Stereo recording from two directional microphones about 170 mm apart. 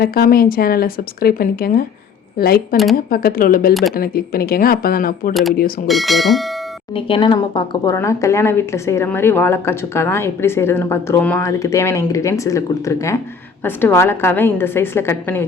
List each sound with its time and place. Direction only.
0.0 s speech: 60° left (ahead or behind)
2.9 s speech: 65° left (ahead or behind)
5.3 s speech: centre (ahead or behind)
6.9 s a woman's voice: 30° left (ahead or behind); by 15.4 s 15° left (ahead or behind)